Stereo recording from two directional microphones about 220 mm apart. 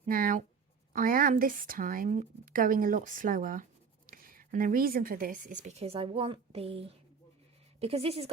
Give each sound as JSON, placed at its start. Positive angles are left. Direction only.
{"t": 0.0, "sound": "a woman's voice", "side_deg": -40}